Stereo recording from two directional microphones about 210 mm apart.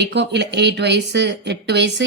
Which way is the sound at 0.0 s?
55° right (ahead or behind).